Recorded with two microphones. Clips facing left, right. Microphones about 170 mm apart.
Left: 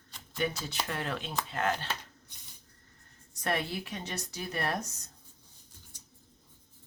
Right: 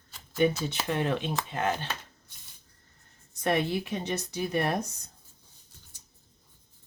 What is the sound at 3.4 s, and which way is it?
Speech, 20° right (ahead or behind).